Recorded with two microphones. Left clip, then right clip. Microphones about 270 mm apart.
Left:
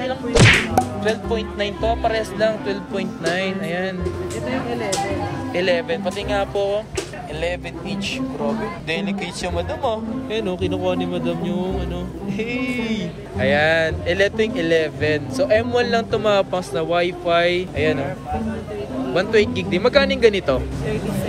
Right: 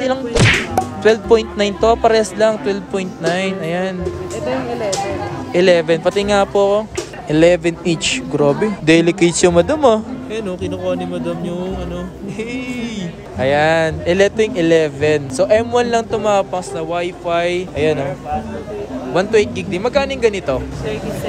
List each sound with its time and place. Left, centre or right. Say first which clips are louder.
0.3 s whip: left 3 dB; centre
1.0 s speech: right 10 dB; centre
5.5 s speech: right 8 dB; centre
10.3 s speech: even; centre
19.1 s speech: right 3 dB; centre